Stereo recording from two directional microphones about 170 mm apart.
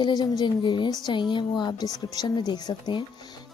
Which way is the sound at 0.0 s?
25° left (ahead or behind).